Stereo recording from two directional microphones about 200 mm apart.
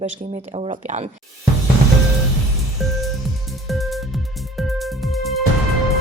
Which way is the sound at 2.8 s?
Centre (ahead or behind).